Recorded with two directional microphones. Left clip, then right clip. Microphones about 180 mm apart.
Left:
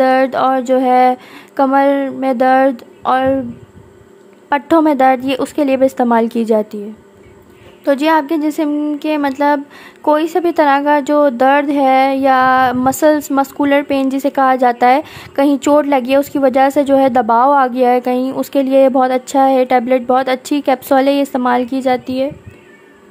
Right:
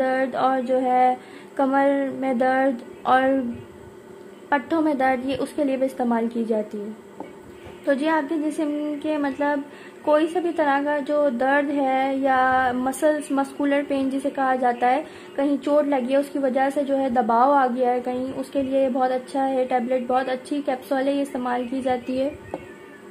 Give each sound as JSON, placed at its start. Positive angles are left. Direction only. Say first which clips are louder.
{"t": 0.0, "sound": "a sound", "louder": "left 10 dB", "side_deg": 25}
{"t": 1.6, "sound": "a woman's voice", "louder": "left 8 dB", "side_deg": 25}
{"t": 4.5, "sound": "a woman's voice", "louder": "left 10 dB", "side_deg": 30}
{"t": 7.8, "sound": "a woman's voice", "louder": "left 9 dB", "side_deg": 30}